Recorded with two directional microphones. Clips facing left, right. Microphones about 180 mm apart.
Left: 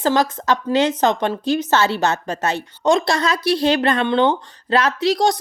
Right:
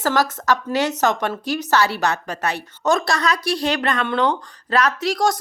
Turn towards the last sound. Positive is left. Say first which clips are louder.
# left 3 dB
turn(degrees=20)  # may be behind; listen again after turning